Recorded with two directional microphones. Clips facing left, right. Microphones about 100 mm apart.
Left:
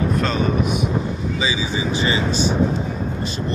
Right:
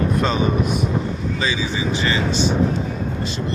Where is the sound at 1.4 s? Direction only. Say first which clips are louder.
Even; 10° left (ahead or behind).